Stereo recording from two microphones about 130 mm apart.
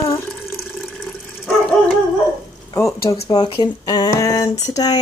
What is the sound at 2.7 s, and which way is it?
Speech, 25° left (ahead or behind).